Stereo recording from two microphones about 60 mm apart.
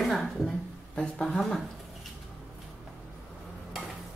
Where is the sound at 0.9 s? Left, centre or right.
Centre.